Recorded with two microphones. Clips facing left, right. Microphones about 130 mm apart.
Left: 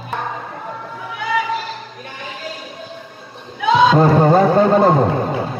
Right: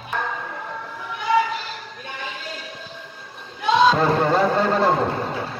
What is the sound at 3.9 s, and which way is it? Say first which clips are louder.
Speech: left 7 dB; 40° left (ahead or behind).